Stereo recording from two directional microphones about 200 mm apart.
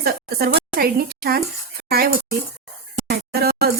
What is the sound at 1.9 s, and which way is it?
Speech, 50° right (ahead or behind).